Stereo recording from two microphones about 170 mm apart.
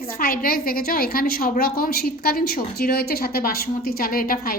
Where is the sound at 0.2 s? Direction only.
60° left (ahead or behind).